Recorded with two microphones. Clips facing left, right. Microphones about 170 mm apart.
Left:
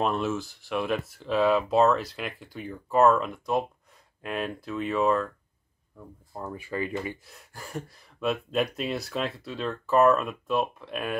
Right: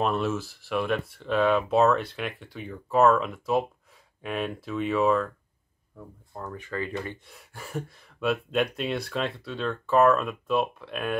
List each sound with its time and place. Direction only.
0.0 s speech: centre (ahead or behind)